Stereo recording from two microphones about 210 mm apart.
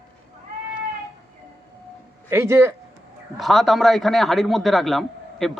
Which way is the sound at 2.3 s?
10° right (ahead or behind).